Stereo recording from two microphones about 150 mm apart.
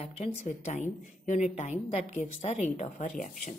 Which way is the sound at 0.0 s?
45° left (ahead or behind).